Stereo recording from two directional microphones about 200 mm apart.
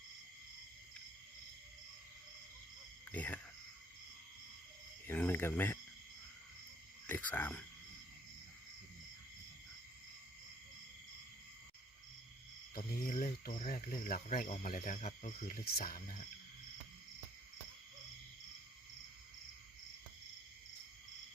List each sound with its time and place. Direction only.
3.1 s speech: 10° left (ahead or behind)
5.0 s speech: 10° left (ahead or behind)
7.1 s a sound: 10° left (ahead or behind)
12.7 s cricket: 45° left (ahead or behind)